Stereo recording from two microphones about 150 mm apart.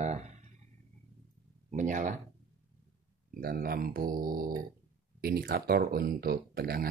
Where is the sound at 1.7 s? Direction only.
55° right (ahead or behind).